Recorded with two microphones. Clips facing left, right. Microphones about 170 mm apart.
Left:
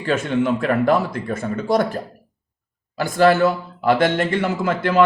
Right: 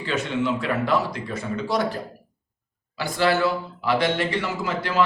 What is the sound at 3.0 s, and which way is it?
Speech, 50° left (ahead or behind).